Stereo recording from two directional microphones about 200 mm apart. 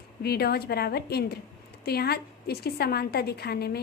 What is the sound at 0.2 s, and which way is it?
A woman's voice, 50° left (ahead or behind).